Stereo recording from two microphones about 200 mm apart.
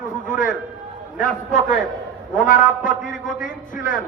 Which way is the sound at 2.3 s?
40° left (ahead or behind).